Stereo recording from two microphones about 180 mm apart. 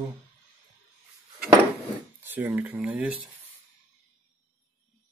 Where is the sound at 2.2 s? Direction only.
10° right (ahead or behind).